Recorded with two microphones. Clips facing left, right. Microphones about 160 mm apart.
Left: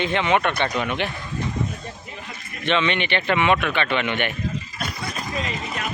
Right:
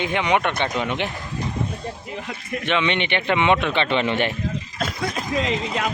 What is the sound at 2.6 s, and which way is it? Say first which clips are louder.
A man's voice: left 1 dB; 15° right (ahead or behind).